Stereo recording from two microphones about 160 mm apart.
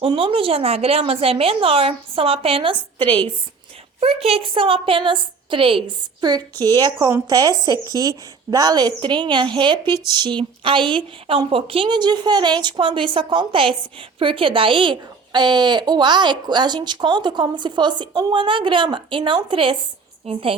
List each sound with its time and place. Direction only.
0.0 s a woman's voice: 35° right (ahead or behind)